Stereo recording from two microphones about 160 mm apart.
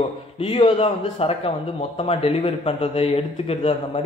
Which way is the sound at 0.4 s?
35° left (ahead or behind).